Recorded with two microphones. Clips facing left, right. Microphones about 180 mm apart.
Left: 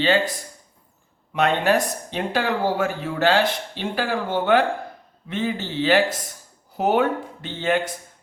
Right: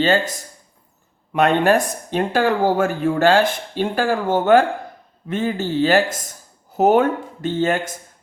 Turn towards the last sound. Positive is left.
turn(degrees=-45)  # may be behind; listen again after turning